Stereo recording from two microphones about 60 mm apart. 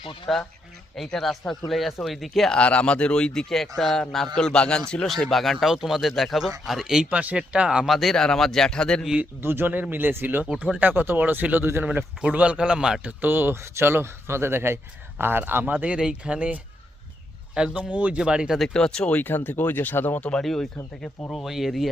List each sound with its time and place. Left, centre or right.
0.3 s speech: centre
2.5 s speech: left
5.0 s speech: centre
7.1 s speech: right
7.9 s speech: centre
8.1 s speech: centre
9.4 s speech: right
12.2 s speech: right
13.2 s speech: right
16.0 s speech: centre
18.7 s speech: centre
19.1 s speech: left
20.4 s speech: centre